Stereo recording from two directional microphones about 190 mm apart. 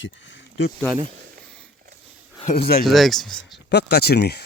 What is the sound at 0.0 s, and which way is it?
Speech, 75° left (ahead or behind).